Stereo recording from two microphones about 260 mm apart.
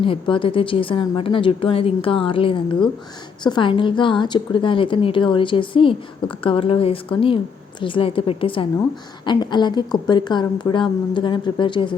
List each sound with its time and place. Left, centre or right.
0.0 s a woman's voice: centre